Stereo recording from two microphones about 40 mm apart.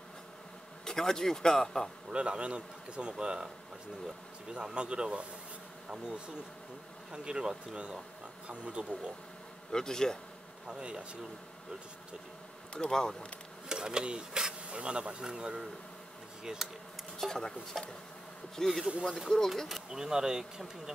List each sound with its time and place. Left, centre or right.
0.8 s speech: centre
2.0 s speech: right
4.7 s speech: right
9.7 s speech: centre
10.7 s speech: right
12.7 s speech: centre
13.7 s speech: centre
17.2 s speech: centre
19.7 s speech: centre